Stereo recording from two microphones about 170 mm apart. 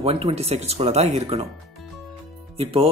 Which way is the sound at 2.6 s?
35° right (ahead or behind).